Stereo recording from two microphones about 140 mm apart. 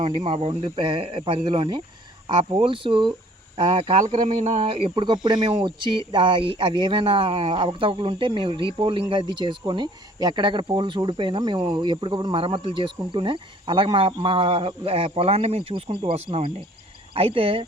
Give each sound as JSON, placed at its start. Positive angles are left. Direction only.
{"t": 0.0, "sound": "speech", "side_deg": -40}
{"t": 4.1, "sound": "speech", "side_deg": -55}
{"t": 4.6, "sound": "speech", "side_deg": -40}